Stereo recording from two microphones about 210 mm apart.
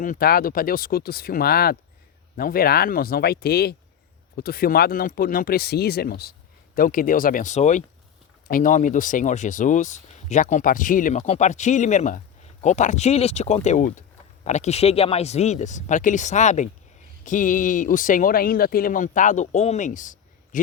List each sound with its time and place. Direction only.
0.0 s speech: 40° left (ahead or behind)